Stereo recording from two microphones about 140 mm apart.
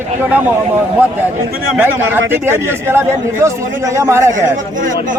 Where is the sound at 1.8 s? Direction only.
15° right (ahead or behind).